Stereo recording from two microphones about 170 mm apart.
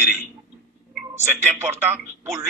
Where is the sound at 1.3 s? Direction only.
10° right (ahead or behind).